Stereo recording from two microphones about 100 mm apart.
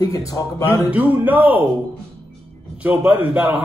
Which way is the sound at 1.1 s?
15° right (ahead or behind).